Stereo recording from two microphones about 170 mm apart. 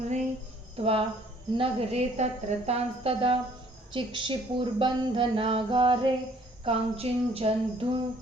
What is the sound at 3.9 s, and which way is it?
Speech, 30° right (ahead or behind).